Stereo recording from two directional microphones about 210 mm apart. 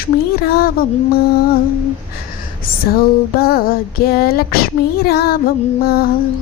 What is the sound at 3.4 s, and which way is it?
A woman's voice, 45° left (ahead or behind).